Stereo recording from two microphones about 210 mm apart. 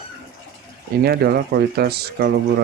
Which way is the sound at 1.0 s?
50° right (ahead or behind).